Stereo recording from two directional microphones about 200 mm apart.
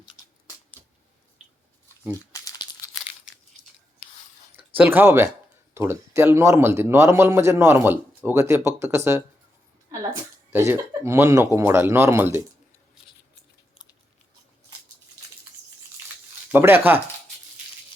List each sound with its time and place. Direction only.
2.3 s crumpling: 20° left (ahead or behind)
3.3 s crunch: 5° right (ahead or behind)
4.5 s a man's voice: 10° right (ahead or behind)
10.7 s a man's voice: 10° right (ahead or behind)
16.5 s a man's voice: 10° right (ahead or behind)